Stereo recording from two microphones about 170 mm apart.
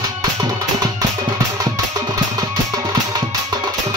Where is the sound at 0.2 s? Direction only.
25° right (ahead or behind).